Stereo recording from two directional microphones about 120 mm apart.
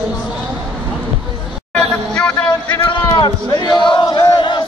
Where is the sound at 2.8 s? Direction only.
40° left (ahead or behind).